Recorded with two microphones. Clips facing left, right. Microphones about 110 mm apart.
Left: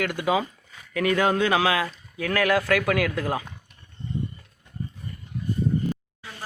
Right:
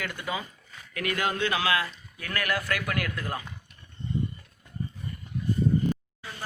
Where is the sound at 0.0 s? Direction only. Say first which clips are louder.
Left 9 dB; 85° left.